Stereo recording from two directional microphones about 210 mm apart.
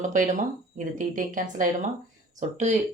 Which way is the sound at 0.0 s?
40° right (ahead or behind).